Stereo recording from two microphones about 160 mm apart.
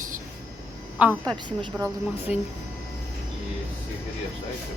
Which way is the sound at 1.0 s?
10° right (ahead or behind).